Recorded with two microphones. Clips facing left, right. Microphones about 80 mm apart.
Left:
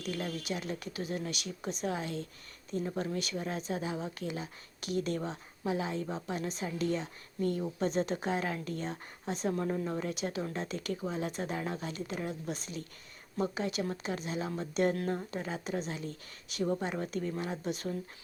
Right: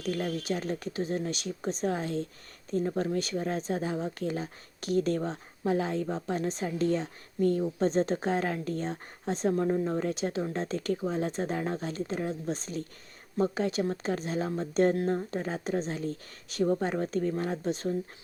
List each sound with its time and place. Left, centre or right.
0.0 s speech: right